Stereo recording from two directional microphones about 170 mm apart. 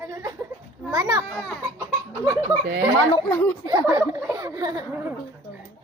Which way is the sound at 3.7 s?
20° right (ahead or behind).